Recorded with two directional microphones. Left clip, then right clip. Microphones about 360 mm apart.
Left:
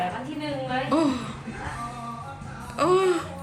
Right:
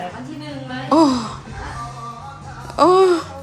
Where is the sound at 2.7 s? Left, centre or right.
Centre.